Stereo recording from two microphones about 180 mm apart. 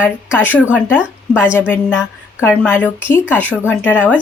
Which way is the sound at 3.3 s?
10° left (ahead or behind).